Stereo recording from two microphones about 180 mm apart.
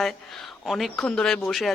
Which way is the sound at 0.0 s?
Centre (ahead or behind).